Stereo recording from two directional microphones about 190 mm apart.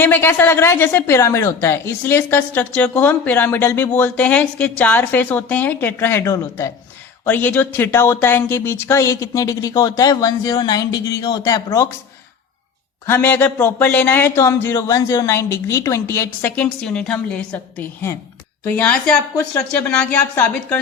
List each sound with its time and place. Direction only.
0.0 s a woman's voice: 10° left (ahead or behind)
13.1 s a woman's voice: 10° left (ahead or behind)